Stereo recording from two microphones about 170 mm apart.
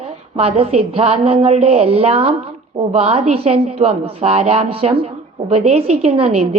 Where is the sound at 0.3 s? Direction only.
35° right (ahead or behind).